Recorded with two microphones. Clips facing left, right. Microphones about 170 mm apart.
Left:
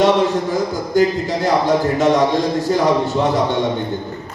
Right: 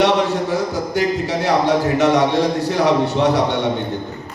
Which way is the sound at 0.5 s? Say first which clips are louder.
Left 2 dB; 70° right (ahead or behind).